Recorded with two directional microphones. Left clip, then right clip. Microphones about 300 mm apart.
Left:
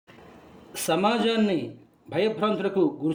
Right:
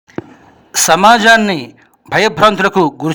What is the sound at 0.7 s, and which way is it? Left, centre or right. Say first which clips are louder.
A man's voice: right 16 dB; right.